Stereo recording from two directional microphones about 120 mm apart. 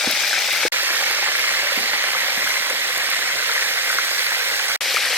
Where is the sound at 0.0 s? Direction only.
5° left (ahead or behind).